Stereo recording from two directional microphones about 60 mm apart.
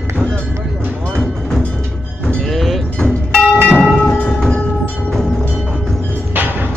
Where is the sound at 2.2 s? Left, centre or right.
Centre.